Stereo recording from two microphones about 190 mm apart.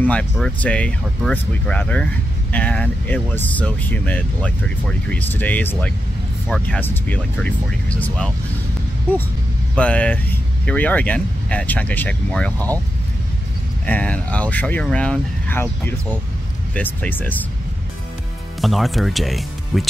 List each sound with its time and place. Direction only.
0.0 s speech: 5° left (ahead or behind)
9.8 s speech: 5° left (ahead or behind)
12.5 s speech: 20° right (ahead or behind)
13.8 s speech: 10° left (ahead or behind)
18.6 s speech: centre (ahead or behind)